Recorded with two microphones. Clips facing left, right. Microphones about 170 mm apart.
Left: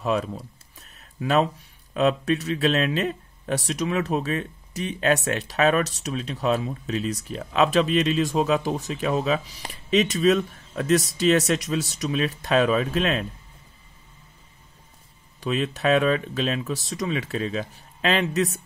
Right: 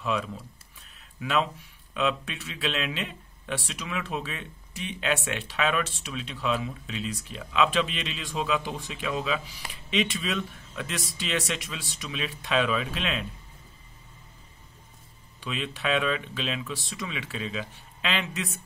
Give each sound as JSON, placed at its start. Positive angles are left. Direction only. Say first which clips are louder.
{"t": 0.0, "sound": "a sound", "louder": "left 5 dB", "side_deg": 40}
{"t": 2.0, "sound": "speech", "louder": "left 7 dB", "side_deg": 40}
{"t": 15.4, "sound": "speech", "louder": "left 8 dB", "side_deg": 40}